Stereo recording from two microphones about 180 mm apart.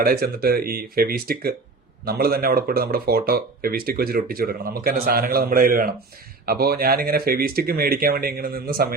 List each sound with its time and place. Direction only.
0.0 s speech: 55° right (ahead or behind)